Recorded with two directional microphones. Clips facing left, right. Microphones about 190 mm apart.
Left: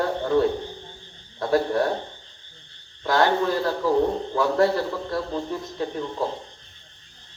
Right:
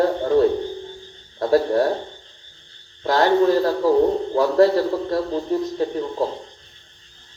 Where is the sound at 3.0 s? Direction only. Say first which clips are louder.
Right 4 dB; 35° right (ahead or behind).